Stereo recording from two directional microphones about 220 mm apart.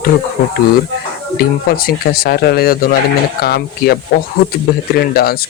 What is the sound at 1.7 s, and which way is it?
Speech, 40° left (ahead or behind).